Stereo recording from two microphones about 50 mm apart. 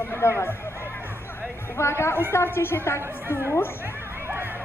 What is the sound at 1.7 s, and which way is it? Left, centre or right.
A woman's voice, left.